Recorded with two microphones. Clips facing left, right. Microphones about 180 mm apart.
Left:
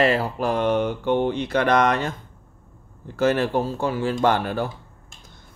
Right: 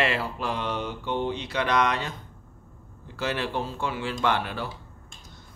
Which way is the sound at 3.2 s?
45° left (ahead or behind).